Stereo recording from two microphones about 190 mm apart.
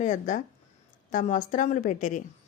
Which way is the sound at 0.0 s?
40° left (ahead or behind).